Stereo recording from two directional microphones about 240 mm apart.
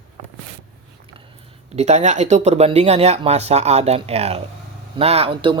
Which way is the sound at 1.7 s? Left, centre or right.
Right.